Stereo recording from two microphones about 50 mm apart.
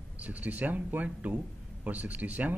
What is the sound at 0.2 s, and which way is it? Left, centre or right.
Speech, right.